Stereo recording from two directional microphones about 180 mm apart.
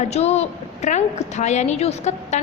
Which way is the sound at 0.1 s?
35° left (ahead or behind).